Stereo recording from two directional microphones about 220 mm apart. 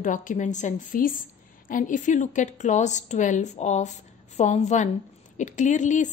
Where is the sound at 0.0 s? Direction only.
35° left (ahead or behind).